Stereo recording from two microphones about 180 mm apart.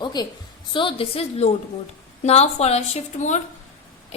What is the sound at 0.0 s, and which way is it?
A woman's voice, 25° left (ahead or behind).